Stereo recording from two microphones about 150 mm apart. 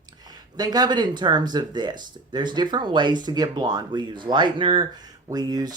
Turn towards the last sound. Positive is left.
turn(degrees=-25)  # may be behind; listen again after turning